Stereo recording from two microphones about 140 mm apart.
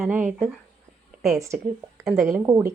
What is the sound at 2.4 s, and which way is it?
Speech, 20° right (ahead or behind).